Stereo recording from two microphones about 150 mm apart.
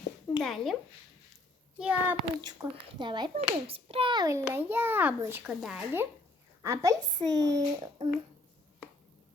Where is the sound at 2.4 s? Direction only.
30° right (ahead or behind); by 5.8 s 5° right (ahead or behind).